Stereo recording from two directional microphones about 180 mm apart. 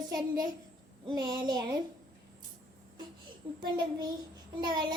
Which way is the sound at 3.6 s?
25° right (ahead or behind).